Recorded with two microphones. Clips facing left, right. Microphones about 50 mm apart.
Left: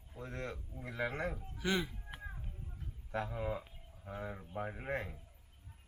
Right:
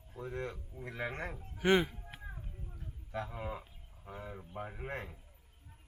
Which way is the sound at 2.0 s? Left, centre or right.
Centre.